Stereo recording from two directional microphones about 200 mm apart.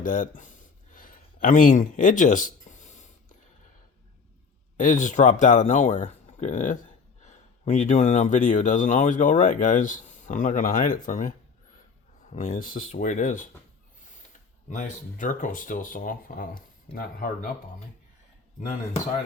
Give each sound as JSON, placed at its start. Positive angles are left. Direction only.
{"t": 0.0, "sound": "speech", "side_deg": 40}
{"t": 0.9, "sound": "a sound", "side_deg": 45}
{"t": 4.8, "sound": "speech", "side_deg": 40}
{"t": 14.7, "sound": "speech", "side_deg": 40}